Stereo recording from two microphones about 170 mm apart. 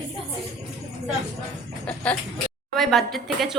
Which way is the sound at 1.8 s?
10° left (ahead or behind).